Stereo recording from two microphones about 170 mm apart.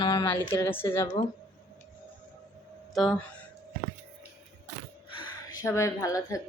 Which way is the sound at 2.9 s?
Centre (ahead or behind).